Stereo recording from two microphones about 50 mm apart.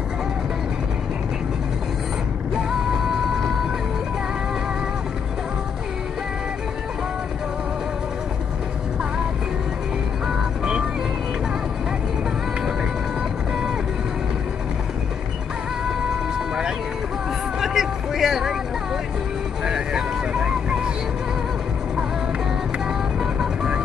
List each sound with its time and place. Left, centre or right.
10.6 s vehicle: centre
17.6 s vehicle: centre
19.6 s vehicle: centre